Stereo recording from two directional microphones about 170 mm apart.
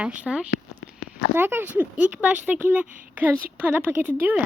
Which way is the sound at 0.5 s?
75° left (ahead or behind).